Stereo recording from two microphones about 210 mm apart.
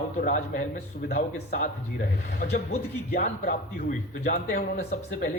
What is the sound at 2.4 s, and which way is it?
A man's voice, 45° left (ahead or behind).